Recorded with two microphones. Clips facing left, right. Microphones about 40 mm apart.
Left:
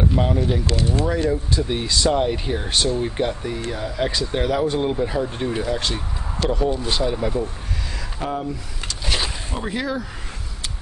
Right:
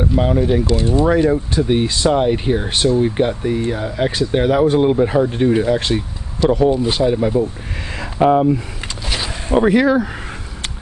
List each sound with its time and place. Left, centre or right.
0.2 s speech: centre
8.0 s speech: right
9.0 s a sound: centre
9.5 s speech: right